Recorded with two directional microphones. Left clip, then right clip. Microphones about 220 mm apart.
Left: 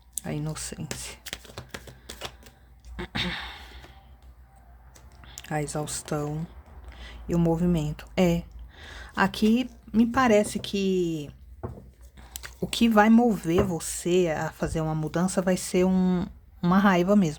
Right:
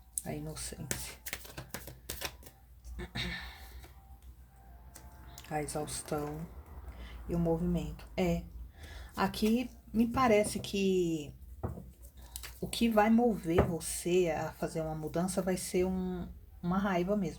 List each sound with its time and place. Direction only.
0.1 s speech: 30° left (ahead or behind)
1.3 s computer keyboard: 20° left (ahead or behind)
2.0 s typewriter: 15° left (ahead or behind)
2.9 s a sound: 40° left (ahead or behind)
5.3 s speech: 30° left (ahead or behind)
12.3 s speech: 30° left (ahead or behind)